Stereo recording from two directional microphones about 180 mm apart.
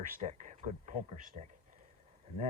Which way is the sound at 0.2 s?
45° right (ahead or behind).